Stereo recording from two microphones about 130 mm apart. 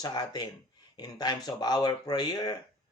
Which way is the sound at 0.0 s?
30° left (ahead or behind).